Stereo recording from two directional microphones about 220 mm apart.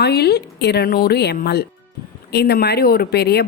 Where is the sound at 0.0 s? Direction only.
45° left (ahead or behind).